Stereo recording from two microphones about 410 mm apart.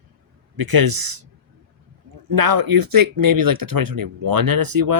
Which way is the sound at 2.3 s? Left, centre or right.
Right.